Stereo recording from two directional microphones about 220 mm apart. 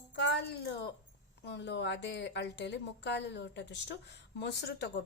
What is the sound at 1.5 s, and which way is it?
A woman's voice, 50° left (ahead or behind).